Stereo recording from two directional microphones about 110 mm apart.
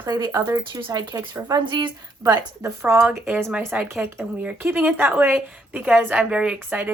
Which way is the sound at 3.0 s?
10° right (ahead or behind).